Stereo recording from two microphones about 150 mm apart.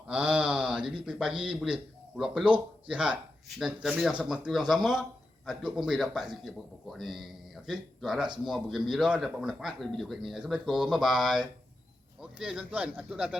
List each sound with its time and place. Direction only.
0.1 s a man's voice: 10° right (ahead or behind)